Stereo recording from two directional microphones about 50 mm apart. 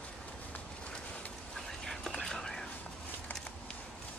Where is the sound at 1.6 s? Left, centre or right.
Centre.